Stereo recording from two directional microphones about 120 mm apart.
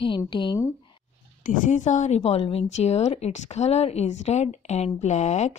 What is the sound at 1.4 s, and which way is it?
Speech, 90° left.